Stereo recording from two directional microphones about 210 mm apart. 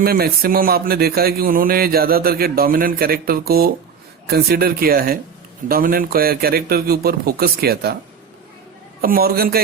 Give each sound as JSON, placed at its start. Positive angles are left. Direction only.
{"t": 0.0, "sound": "speech", "side_deg": -45}
{"t": 9.0, "sound": "speech", "side_deg": -45}